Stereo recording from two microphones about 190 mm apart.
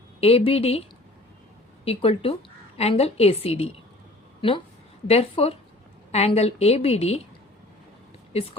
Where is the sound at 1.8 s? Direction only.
30° left (ahead or behind).